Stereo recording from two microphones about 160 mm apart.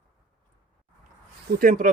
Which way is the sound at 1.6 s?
60° right (ahead or behind).